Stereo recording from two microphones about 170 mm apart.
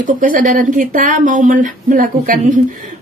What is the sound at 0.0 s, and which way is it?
A woman's voice, 50° right (ahead or behind).